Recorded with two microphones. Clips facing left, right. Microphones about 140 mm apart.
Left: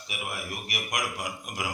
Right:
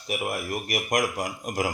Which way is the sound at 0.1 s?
45° right (ahead or behind).